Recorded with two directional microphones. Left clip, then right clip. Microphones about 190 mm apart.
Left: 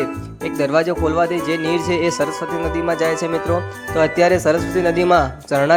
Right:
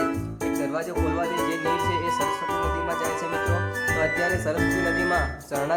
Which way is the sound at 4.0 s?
45° left (ahead or behind).